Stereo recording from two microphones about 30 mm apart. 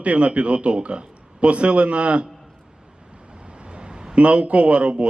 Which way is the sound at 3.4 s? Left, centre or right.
Right.